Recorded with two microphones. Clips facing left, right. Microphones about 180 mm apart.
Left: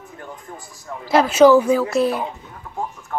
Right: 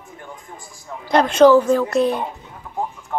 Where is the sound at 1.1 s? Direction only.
5° left (ahead or behind).